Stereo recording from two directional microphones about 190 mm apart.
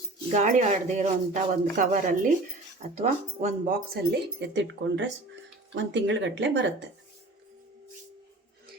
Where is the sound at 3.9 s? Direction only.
60° right (ahead or behind).